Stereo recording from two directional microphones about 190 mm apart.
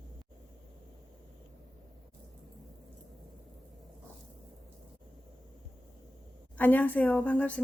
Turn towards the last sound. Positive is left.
turn(degrees=5)  # may be behind; listen again after turning